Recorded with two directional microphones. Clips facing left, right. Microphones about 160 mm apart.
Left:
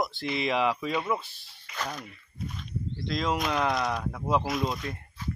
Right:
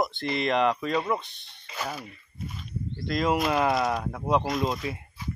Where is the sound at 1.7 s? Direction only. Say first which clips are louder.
Right 1 dB; 5° right (ahead or behind).